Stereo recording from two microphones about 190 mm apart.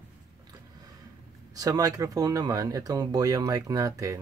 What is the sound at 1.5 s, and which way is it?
Speech, 20° right (ahead or behind).